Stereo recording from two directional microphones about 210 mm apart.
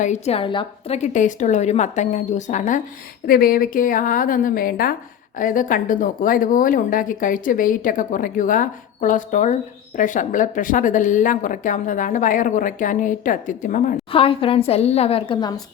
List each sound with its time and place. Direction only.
0.0 s a woman's voice: 30° left (ahead or behind)
14.1 s a woman's voice: 25° left (ahead or behind)